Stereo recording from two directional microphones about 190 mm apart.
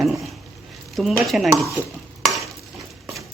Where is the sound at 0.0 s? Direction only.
Centre (ahead or behind).